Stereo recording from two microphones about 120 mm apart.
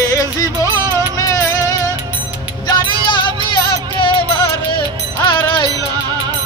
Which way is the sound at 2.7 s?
40° left (ahead or behind).